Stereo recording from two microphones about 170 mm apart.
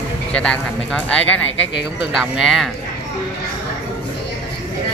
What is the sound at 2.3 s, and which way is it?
Speech, centre (ahead or behind).